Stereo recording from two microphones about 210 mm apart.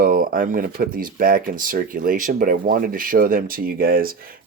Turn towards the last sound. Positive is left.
turn(degrees=-45)  # may be behind; listen again after turning